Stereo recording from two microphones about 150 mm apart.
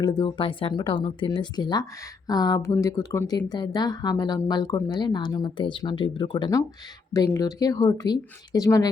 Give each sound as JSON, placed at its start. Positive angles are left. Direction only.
{"t": 0.0, "sound": "speech", "side_deg": 30}